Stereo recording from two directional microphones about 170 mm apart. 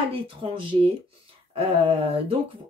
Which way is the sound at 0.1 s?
30° right (ahead or behind).